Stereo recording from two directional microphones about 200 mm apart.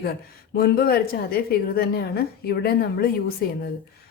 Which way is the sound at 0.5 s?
50° left (ahead or behind).